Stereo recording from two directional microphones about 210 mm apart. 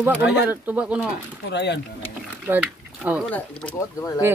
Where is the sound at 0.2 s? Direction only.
55° left (ahead or behind).